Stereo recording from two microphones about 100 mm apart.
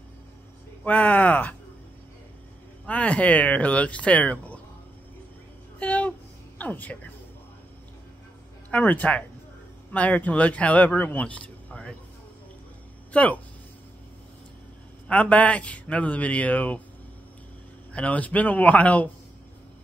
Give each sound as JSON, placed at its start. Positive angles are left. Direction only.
{"t": 0.8, "sound": "a man's voice", "side_deg": 15}
{"t": 2.9, "sound": "a man's voice", "side_deg": 15}
{"t": 5.8, "sound": "a sound", "side_deg": 15}
{"t": 6.6, "sound": "a man's voice", "side_deg": 15}
{"t": 8.6, "sound": "a man's voice", "side_deg": 15}
{"t": 13.1, "sound": "speech", "side_deg": 15}
{"t": 15.0, "sound": "a man's voice", "side_deg": 15}
{"t": 17.9, "sound": "a man's voice", "side_deg": 15}